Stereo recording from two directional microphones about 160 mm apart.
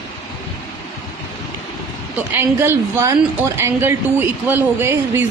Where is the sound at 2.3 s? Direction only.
15° right (ahead or behind).